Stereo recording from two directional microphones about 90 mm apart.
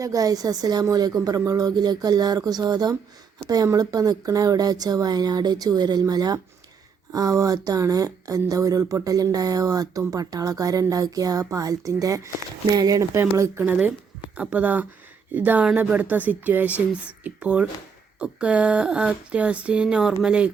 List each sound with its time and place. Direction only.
0.0 s speech: 40° right (ahead or behind)
13.1 s speech: 30° right (ahead or behind)
14.5 s speech: 20° right (ahead or behind)